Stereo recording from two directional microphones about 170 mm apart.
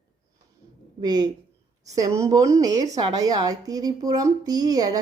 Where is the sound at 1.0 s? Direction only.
25° right (ahead or behind).